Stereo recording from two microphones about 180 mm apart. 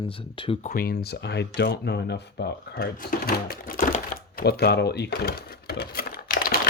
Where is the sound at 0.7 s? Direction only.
55° left (ahead or behind).